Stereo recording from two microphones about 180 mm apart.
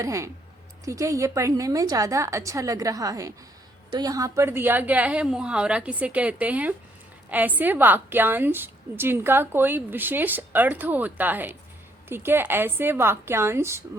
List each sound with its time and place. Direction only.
0.0 s a woman's voice: 15° right (ahead or behind)